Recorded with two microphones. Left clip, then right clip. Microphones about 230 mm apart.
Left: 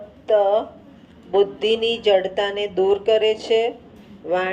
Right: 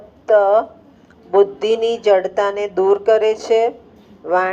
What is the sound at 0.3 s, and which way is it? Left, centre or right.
Speech, right.